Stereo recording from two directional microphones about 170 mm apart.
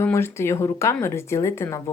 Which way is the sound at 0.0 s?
15° left (ahead or behind).